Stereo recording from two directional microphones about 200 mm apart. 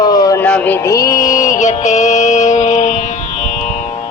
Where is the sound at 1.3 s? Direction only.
40° left (ahead or behind).